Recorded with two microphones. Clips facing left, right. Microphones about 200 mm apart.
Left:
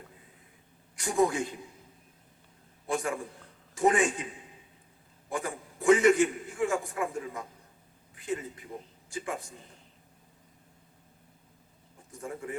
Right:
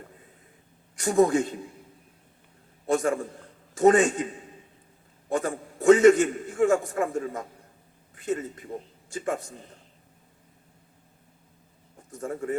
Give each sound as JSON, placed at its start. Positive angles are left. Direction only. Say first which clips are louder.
{"t": 1.0, "sound": "a man's voice", "louder": "right 6 dB", "side_deg": -45}
{"t": 2.8, "sound": "a man's voice", "louder": "right 7 dB", "side_deg": -45}
{"t": 5.3, "sound": "a man's voice", "louder": "right 7 dB", "side_deg": -45}
{"t": 12.1, "sound": "a man's voice", "louder": "right 7 dB", "side_deg": -45}